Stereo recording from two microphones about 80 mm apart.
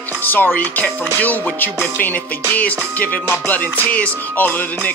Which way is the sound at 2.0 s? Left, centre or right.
Left.